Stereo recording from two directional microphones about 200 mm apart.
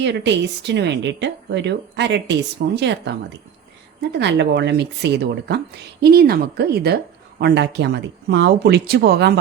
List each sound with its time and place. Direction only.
0.0 s speech: 60° right (ahead or behind)